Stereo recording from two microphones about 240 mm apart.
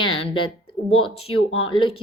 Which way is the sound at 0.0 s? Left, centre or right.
Left.